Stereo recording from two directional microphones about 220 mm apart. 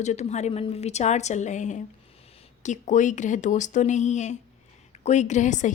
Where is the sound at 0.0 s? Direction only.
30° left (ahead or behind).